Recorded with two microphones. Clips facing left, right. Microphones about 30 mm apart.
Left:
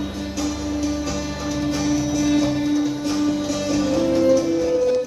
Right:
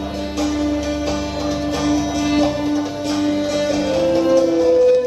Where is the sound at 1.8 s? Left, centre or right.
Right.